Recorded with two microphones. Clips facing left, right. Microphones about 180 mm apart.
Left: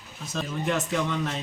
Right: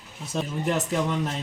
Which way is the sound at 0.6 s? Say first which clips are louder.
Even; 35° right (ahead or behind).